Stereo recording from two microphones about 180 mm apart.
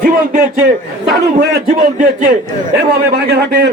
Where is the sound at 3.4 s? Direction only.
70° right (ahead or behind).